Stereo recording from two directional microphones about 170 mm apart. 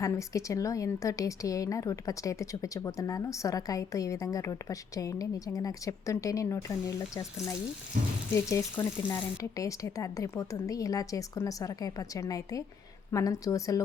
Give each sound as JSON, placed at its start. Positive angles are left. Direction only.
{"t": 0.0, "sound": "a woman's voice", "side_deg": 20}
{"t": 8.4, "sound": "a woman's voice", "side_deg": 20}